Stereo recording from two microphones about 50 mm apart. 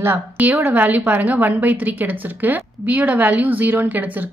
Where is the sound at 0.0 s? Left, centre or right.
Right.